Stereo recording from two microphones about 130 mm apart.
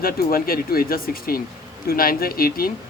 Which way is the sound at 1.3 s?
90° left.